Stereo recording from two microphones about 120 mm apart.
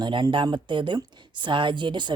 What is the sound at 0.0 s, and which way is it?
Speech, 40° right (ahead or behind).